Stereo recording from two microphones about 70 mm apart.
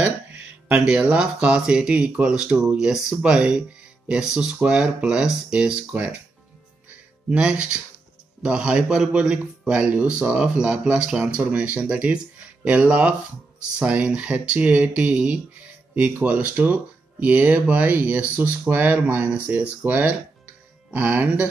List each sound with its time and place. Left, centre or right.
0.7 s a man's voice: centre
7.2 s a man's voice: centre